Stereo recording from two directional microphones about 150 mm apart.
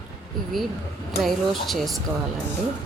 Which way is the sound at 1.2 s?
Centre (ahead or behind).